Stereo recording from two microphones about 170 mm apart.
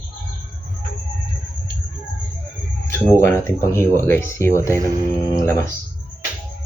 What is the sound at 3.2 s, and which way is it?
Speech, 15° left (ahead or behind).